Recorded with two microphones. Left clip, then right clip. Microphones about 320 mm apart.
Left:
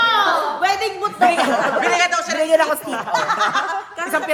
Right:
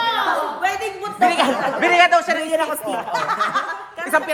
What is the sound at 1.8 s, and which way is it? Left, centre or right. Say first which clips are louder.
Speech: right 3 dB; right.